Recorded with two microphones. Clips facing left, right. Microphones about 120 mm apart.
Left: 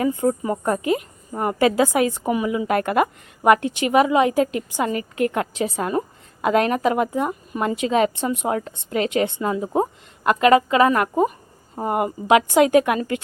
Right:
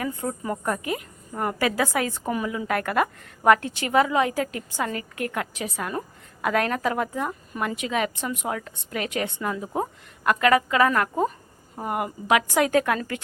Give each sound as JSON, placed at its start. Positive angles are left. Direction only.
{"t": 0.0, "sound": "a woman's voice", "side_deg": 25}
{"t": 2.6, "sound": "a woman's voice", "side_deg": 25}